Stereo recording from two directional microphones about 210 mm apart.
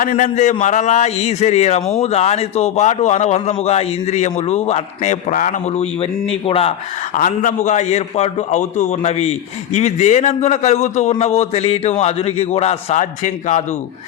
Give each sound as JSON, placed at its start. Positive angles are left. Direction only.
{"t": 0.0, "sound": "a man's voice", "side_deg": 35}
{"t": 7.2, "sound": "a man's voice", "side_deg": 40}